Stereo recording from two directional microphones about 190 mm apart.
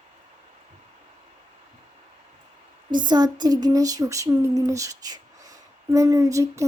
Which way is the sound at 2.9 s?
25° right (ahead or behind).